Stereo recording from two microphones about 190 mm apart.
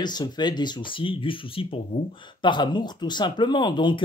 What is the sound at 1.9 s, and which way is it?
Speech, 40° left (ahead or behind).